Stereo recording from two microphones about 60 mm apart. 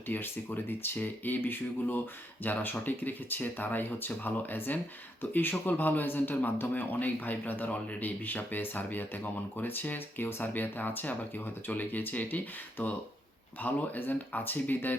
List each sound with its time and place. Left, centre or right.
0.1 s speech: left
13.6 s speech: left